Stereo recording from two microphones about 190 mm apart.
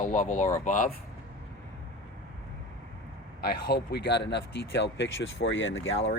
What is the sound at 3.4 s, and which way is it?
Speech, 55° left (ahead or behind).